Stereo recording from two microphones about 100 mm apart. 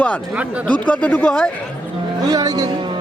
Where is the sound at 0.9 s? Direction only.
15° left (ahead or behind).